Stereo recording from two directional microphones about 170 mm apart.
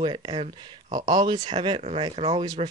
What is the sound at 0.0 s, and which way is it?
Speech, 30° right (ahead or behind).